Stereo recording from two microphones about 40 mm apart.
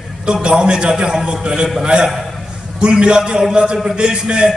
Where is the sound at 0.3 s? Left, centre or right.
Right.